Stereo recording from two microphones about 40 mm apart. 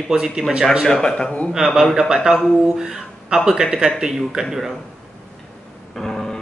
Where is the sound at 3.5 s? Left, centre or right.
Centre.